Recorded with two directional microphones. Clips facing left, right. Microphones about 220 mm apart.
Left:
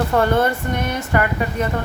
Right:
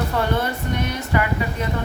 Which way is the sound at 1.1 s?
50° left (ahead or behind).